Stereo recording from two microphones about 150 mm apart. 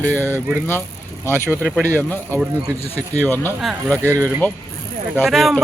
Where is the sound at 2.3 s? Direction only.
20° right (ahead or behind).